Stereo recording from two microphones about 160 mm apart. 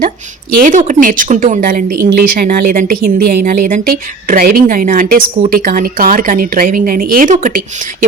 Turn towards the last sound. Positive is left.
turn(degrees=-55)  # may be behind; listen again after turning